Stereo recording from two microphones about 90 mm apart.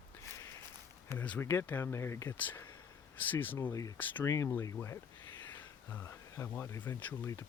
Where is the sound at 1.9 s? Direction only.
30° left (ahead or behind).